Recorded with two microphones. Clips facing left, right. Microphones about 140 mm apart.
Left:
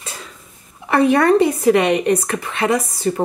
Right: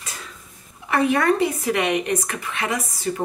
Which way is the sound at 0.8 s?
35° left (ahead or behind).